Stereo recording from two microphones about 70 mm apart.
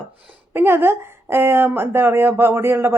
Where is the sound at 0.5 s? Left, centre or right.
Right.